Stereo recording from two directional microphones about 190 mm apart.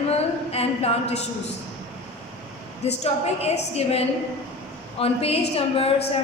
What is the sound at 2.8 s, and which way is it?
A woman's voice, 35° left (ahead or behind).